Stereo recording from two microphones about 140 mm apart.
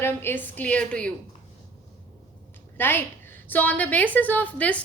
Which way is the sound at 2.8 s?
15° left (ahead or behind).